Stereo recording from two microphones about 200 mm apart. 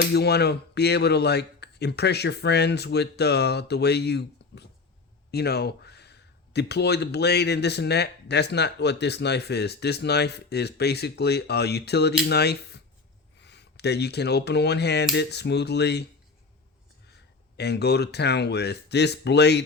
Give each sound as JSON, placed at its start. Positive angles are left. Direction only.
{"t": 0.1, "sound": "speech", "side_deg": 55}
{"t": 17.6, "sound": "speech", "side_deg": 55}